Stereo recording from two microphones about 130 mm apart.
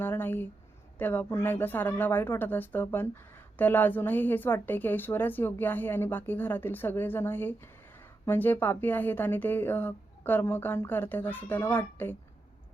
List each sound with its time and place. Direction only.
0.0 s speech: 15° left (ahead or behind)